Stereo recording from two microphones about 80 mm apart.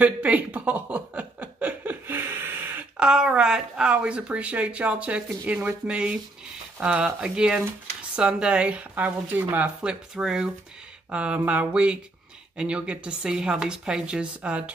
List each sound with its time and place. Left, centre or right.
0.0 s chuckle: centre
3.0 s speech: centre
9.8 s speech: centre